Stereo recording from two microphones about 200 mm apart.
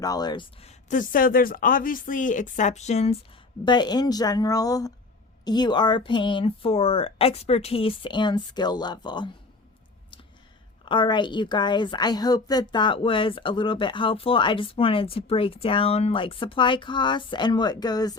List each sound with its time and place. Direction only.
0.0 s speech: 20° left (ahead or behind)
3.7 s a woman's voice: 20° left (ahead or behind)
10.8 s a woman's voice: 25° left (ahead or behind)